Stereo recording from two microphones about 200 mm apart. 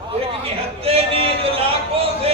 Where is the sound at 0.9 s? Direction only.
30° right (ahead or behind).